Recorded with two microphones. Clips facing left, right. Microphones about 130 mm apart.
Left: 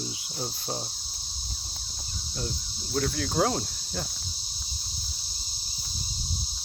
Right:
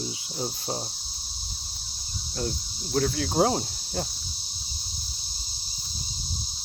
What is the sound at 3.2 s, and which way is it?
Cricket, 30° right (ahead or behind).